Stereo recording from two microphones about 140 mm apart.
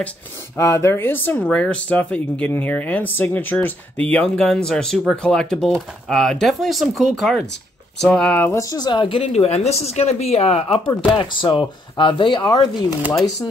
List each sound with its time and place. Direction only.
0.6 s speech: 20° left (ahead or behind)
8.5 s speech: 30° left (ahead or behind); by 10.8 s 45° left (ahead or behind)
11.1 s speech: 35° left (ahead or behind)